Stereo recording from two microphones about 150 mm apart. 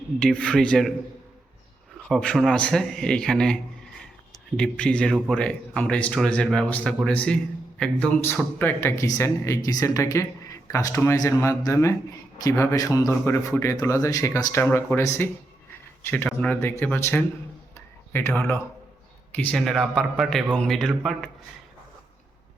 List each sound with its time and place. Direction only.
0.2 s a man's voice: 5° left (ahead or behind)
2.0 s a man's voice: 5° left (ahead or behind)
17.7 s a sound: 15° left (ahead or behind)
19.4 s a man's voice: 5° left (ahead or behind)